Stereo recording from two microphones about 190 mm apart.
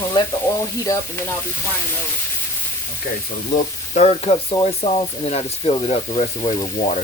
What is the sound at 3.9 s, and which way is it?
Frying, 35° left (ahead or behind).